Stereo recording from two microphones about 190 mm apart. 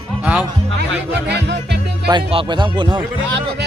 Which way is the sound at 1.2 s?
60° right (ahead or behind).